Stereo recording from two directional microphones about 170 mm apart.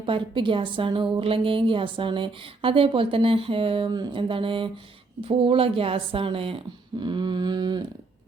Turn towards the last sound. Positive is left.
turn(degrees=-25)  # may be behind; listen again after turning